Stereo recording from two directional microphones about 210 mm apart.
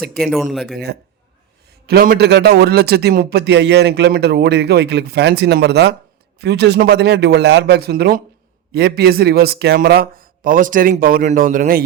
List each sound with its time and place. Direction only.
0.2 s speech: centre (ahead or behind)
1.9 s a man's voice: 45° right (ahead or behind)